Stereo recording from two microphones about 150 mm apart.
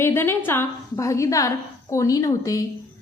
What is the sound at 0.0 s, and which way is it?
A woman's voice, 15° left (ahead or behind).